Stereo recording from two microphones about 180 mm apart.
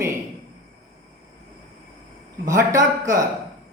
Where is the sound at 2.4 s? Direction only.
15° right (ahead or behind).